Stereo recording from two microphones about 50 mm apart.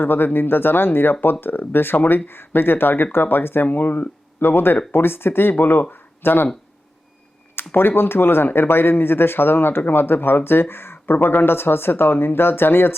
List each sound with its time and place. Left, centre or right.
0.0 s speech: left
5.9 s a sound: left
7.7 s speech: left